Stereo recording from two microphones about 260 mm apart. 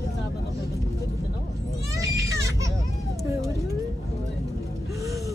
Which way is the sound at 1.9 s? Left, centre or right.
Centre.